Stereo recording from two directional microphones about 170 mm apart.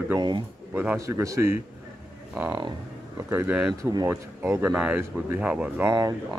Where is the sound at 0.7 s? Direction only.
15° right (ahead or behind).